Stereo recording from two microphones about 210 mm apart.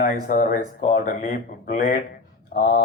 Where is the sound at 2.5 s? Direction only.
40° left (ahead or behind).